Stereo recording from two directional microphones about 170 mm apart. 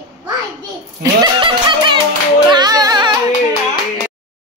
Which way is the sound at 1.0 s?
25° right (ahead or behind).